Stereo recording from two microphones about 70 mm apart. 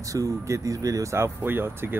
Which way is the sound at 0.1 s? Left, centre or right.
Right.